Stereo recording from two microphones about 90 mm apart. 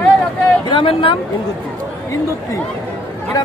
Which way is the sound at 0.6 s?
75° left (ahead or behind).